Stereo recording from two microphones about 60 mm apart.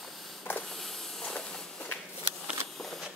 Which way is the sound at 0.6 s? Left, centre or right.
Centre.